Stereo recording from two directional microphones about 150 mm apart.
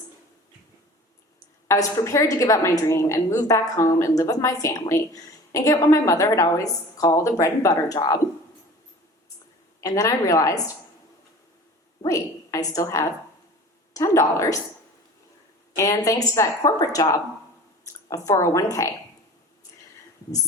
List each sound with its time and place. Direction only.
1.6 s a woman's voice: 20° left (ahead or behind)
9.8 s a woman's voice: 20° left (ahead or behind)
12.0 s a woman's voice: 20° left (ahead or behind)
15.7 s a woman's voice: 20° left (ahead or behind)